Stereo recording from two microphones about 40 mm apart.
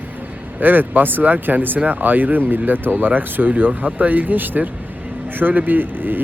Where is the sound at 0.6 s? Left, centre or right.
Right.